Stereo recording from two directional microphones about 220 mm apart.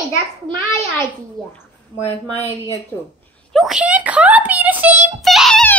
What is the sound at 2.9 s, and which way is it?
Squeak, 10° left (ahead or behind).